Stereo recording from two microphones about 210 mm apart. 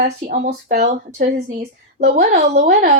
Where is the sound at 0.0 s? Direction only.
35° right (ahead or behind).